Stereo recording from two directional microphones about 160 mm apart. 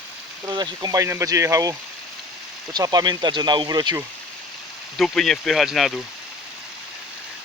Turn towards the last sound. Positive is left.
turn(degrees=0)  # may be behind; listen again after turning